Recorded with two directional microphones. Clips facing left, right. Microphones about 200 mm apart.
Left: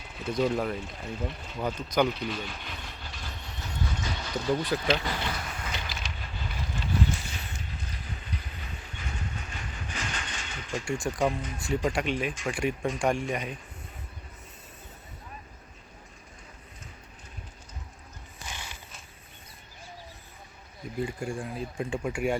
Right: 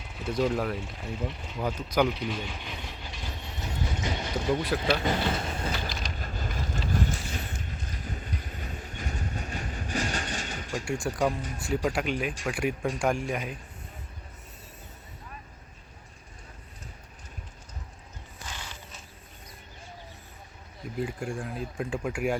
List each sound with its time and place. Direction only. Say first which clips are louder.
0.2 s speech: even; centre (ahead or behind); by 4.4 s 20° right (ahead or behind)
4.7 s speech: even; 5° left (ahead or behind)
5.0 s vehicle: right 6 dB; 25° right (ahead or behind)
11.0 s speech: even; centre (ahead or behind)
18.4 s a sound: even; 10° left (ahead or behind)
21.0 s speech: even; centre (ahead or behind)